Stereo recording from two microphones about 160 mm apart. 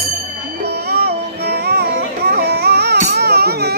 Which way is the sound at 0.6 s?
80° right.